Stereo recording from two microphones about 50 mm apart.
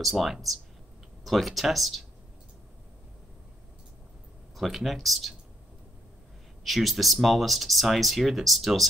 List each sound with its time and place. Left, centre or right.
0.0 s speech: centre
4.6 s speech: centre
6.6 s speech: centre